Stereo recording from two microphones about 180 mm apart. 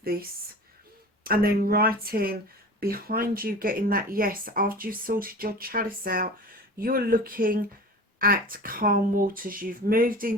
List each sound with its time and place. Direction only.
0.0 s speech: 55° right (ahead or behind)